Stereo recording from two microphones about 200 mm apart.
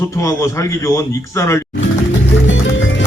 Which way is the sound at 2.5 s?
70° left (ahead or behind).